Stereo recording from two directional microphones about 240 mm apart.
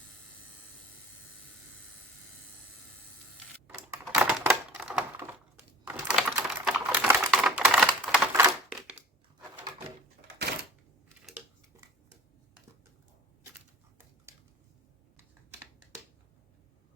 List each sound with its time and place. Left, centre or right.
3.7 s typewriter: centre
5.9 s typing: centre
10.2 s a sound: right